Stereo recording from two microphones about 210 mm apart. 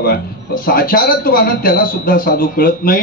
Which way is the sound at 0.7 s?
45° left (ahead or behind).